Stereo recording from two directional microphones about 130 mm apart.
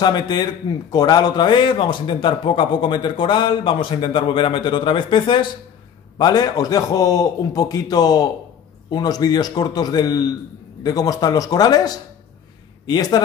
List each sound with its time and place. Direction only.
0.0 s a man's voice: 35° left (ahead or behind)